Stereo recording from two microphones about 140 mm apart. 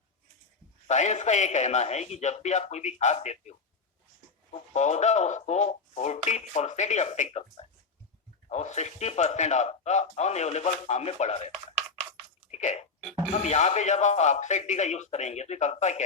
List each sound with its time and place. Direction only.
0.9 s a man's voice: 55° left (ahead or behind)
4.7 s speech: 55° left (ahead or behind)
12.5 s a sound: 55° left (ahead or behind)
13.3 s a man's voice: 55° left (ahead or behind)